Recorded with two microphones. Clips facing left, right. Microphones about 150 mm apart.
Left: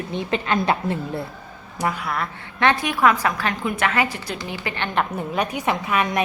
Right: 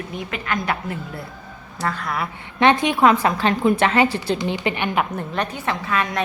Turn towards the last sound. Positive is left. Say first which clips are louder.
# left 1 dB
turn(degrees=15)  # may be behind; listen again after turning